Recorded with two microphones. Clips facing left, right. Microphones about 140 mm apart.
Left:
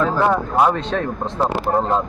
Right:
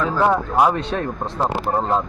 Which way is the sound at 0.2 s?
5° right (ahead or behind).